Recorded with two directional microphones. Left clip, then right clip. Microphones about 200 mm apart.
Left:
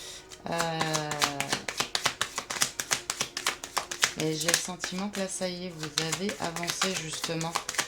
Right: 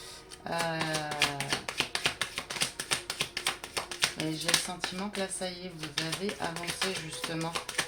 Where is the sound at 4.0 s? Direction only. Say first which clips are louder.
Left 3 dB; 20° left (ahead or behind).